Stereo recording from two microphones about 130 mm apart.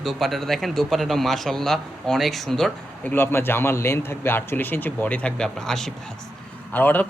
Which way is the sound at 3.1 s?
15° left (ahead or behind).